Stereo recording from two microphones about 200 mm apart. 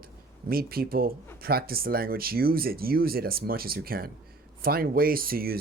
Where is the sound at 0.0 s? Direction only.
50° right (ahead or behind).